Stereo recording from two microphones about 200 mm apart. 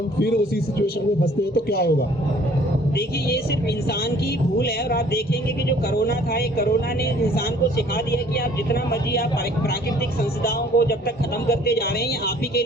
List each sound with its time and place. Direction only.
0.8 s a man's voice: 50° left (ahead or behind)
4.5 s a man's voice: 50° left (ahead or behind)
10.4 s a man's voice: 50° left (ahead or behind)